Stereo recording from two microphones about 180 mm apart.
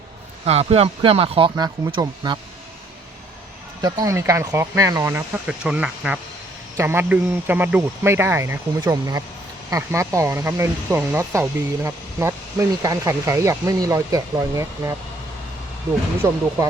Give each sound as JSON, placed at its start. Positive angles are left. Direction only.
{"t": 0.4, "sound": "speech", "side_deg": -35}
{"t": 3.8, "sound": "speech", "side_deg": -20}
{"t": 16.2, "sound": "speech", "side_deg": -20}